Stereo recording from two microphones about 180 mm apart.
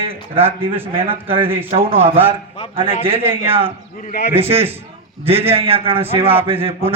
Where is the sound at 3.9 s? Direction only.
50° left (ahead or behind).